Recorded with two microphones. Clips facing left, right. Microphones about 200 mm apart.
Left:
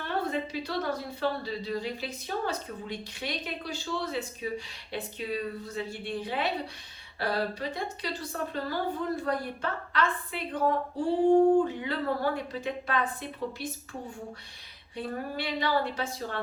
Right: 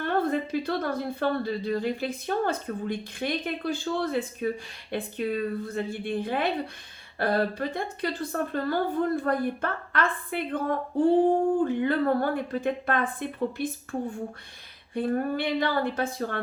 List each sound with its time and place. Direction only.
0.0 s a woman's voice: 55° right (ahead or behind)
14.9 s a woman's voice: 55° right (ahead or behind)